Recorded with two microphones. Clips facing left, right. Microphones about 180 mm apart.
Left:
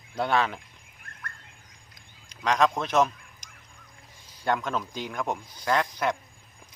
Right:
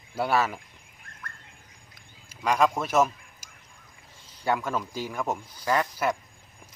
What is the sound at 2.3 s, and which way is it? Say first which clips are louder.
Speech: even; 5° right (ahead or behind).